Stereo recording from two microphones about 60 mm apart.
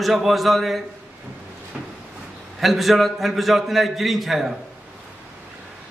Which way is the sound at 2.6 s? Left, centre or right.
Centre.